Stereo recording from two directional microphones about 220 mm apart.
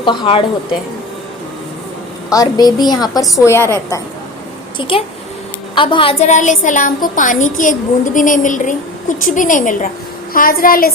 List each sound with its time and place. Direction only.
0.0 s a woman's voice: 20° left (ahead or behind)
2.3 s a woman's voice: 15° left (ahead or behind)
4.8 s a woman's voice: 25° left (ahead or behind); by 10.9 s 40° left (ahead or behind)